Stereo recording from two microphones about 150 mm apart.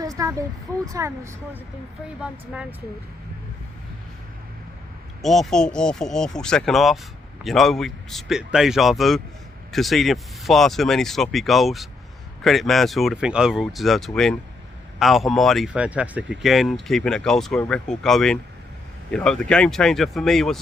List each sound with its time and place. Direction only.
0.0 s a sound: 20° right (ahead or behind)
0.9 s speech: 20° right (ahead or behind)
2.2 s speech: 5° right (ahead or behind)
5.2 s speech: centre (ahead or behind)